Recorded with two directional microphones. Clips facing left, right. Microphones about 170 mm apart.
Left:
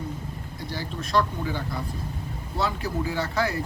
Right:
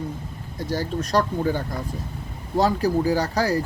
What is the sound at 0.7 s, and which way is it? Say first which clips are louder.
Speech: right 4 dB; 45° right (ahead or behind).